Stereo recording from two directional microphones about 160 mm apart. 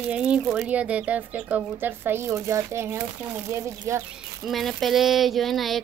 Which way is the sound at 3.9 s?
20° right (ahead or behind).